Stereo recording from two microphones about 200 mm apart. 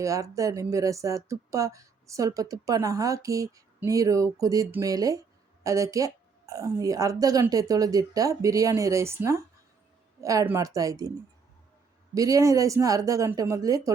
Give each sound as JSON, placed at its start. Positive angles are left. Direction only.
{"t": 0.0, "sound": "speech", "side_deg": -15}
{"t": 12.1, "sound": "speech", "side_deg": -15}